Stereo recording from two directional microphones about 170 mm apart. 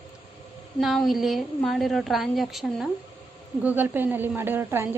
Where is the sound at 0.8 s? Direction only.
Centre (ahead or behind).